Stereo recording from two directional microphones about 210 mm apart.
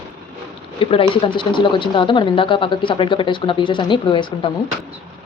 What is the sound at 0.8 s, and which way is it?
A woman's voice, 25° left (ahead or behind).